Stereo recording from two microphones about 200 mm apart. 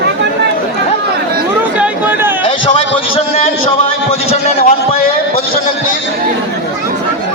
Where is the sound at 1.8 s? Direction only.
10° right (ahead or behind).